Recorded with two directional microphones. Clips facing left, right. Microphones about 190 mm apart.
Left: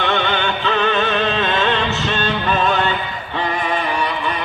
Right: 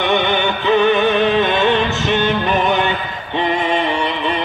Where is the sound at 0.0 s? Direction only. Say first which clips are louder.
Right 3 dB; 15° right (ahead or behind).